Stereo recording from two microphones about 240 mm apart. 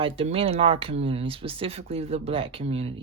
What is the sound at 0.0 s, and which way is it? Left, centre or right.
Speech, right.